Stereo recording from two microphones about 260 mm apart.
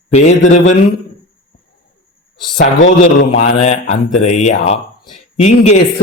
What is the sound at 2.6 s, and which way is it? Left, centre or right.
A man's voice, left.